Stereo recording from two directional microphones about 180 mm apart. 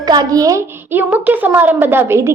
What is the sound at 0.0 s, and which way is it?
Speech, 20° right (ahead or behind).